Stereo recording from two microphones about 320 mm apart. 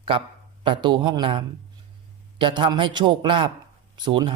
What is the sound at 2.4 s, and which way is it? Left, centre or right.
Speech, centre.